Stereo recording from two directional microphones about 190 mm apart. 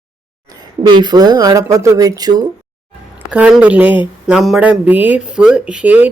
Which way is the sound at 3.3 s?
5° right (ahead or behind).